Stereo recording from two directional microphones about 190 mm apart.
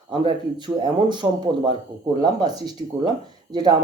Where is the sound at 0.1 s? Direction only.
25° right (ahead or behind).